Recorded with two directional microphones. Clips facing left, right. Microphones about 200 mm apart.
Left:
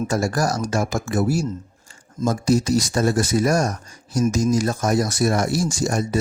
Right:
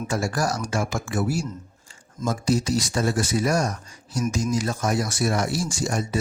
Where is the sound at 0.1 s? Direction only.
40° left (ahead or behind).